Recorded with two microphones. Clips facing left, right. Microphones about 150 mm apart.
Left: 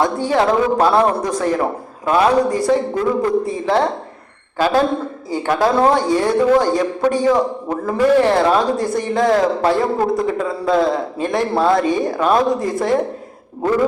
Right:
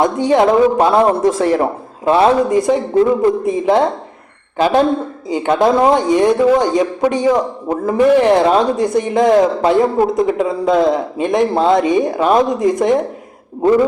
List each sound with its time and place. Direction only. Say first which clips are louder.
0.0 s a woman's voice: right 4 dB; 20° right (ahead or behind)